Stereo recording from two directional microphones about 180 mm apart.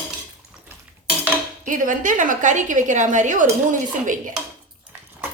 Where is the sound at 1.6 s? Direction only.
45° right (ahead or behind).